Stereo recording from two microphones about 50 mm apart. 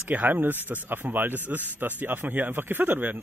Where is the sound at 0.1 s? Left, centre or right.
Right.